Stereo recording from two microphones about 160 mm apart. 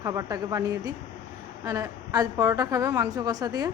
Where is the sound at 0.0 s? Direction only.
20° right (ahead or behind).